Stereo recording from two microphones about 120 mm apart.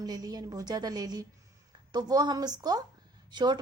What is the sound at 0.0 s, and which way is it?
A woman's voice, 35° right (ahead or behind).